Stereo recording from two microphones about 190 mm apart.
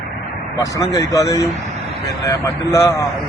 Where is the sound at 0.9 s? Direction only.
15° left (ahead or behind).